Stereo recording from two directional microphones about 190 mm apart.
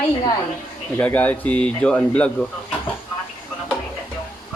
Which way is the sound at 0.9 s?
10° left (ahead or behind).